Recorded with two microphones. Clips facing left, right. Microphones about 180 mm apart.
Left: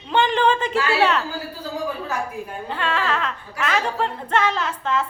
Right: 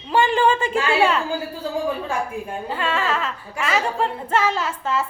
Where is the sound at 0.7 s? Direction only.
25° right (ahead or behind).